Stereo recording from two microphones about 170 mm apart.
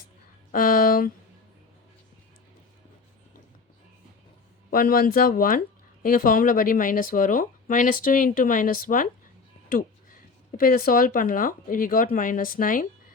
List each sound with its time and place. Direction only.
0.5 s speech: 55° left (ahead or behind)
4.7 s speech: 60° left (ahead or behind)
10.6 s speech: 60° left (ahead or behind)